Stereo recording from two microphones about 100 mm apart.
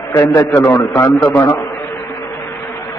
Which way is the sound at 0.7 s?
20° left (ahead or behind).